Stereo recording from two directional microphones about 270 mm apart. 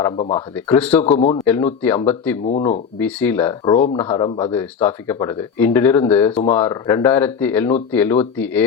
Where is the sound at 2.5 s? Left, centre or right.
Left.